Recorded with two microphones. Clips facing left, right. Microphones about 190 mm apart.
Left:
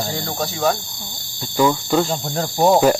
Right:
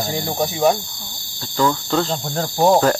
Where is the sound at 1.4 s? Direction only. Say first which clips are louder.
Left 2 dB; 10° left (ahead or behind).